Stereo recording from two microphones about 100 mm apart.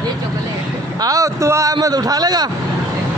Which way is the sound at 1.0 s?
35° right (ahead or behind).